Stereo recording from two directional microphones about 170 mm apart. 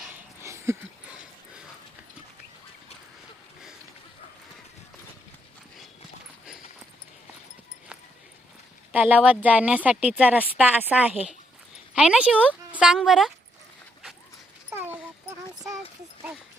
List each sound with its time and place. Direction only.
0.4 s a sound: 15° right (ahead or behind)
8.9 s a woman's voice: 10° right (ahead or behind)
14.7 s dog: 10° right (ahead or behind)